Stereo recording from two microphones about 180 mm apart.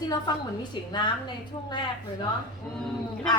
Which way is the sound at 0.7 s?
25° left (ahead or behind).